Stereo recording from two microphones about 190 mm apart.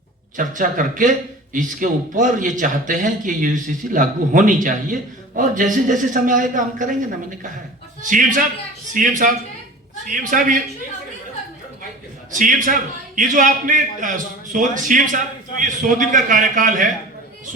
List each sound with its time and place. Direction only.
0.3 s a man's voice: 45° right (ahead or behind)
12.3 s a man's voice: 45° right (ahead or behind)